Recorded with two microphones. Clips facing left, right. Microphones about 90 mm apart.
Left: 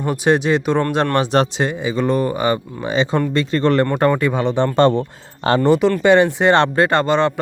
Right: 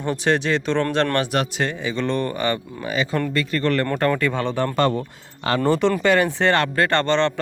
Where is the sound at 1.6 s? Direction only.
15° left (ahead or behind).